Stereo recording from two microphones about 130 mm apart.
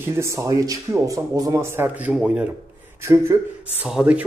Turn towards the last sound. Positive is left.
turn(degrees=-10)  # may be behind; listen again after turning